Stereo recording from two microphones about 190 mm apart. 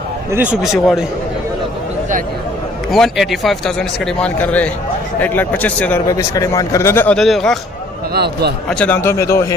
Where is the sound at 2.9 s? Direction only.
Centre (ahead or behind).